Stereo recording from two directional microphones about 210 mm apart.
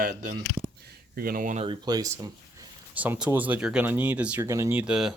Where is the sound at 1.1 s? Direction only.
45° right (ahead or behind).